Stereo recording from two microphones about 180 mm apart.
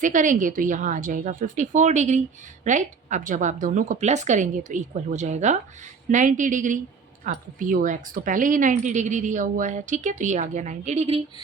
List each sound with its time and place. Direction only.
0.0 s a woman's voice: 45° right (ahead or behind)